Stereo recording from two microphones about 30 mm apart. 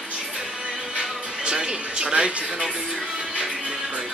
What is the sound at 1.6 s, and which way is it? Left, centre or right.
Speech, right.